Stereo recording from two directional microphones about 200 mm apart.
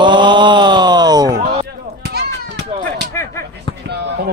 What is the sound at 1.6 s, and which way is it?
Run, 55° right (ahead or behind).